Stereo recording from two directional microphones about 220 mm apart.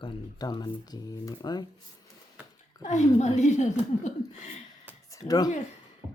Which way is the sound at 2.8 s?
30° left (ahead or behind).